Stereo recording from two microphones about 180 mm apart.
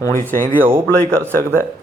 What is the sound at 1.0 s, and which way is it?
Speech, 15° right (ahead or behind).